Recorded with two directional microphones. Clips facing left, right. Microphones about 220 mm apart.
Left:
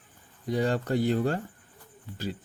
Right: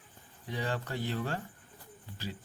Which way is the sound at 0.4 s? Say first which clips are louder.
Left 9 dB; 40° left (ahead or behind).